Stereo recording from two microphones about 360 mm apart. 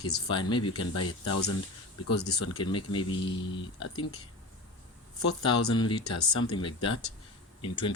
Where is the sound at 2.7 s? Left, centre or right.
Centre.